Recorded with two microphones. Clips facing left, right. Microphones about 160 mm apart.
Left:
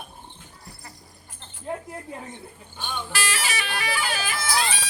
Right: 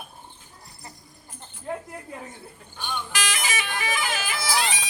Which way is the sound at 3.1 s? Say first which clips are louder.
Left 1 dB; 15° right (ahead or behind).